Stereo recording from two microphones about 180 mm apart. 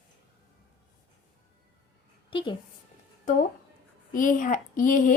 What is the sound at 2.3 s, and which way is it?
Speech, 30° left (ahead or behind).